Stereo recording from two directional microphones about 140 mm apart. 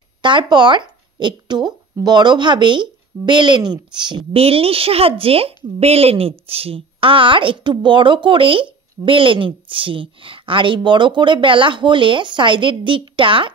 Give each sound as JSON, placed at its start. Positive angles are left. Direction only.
{"t": 0.2, "sound": "speech", "side_deg": -35}